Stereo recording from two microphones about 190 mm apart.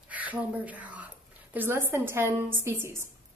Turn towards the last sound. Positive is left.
turn(degrees=-15)  # may be behind; listen again after turning